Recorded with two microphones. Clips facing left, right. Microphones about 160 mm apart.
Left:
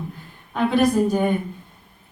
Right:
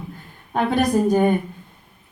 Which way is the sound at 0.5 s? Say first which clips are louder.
Left 1 dB; 50° right (ahead or behind).